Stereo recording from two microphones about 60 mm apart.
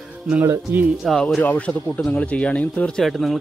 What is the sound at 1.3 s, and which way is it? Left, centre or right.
A man's voice, left.